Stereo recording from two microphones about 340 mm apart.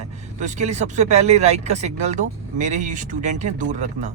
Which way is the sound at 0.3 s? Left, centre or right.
Right.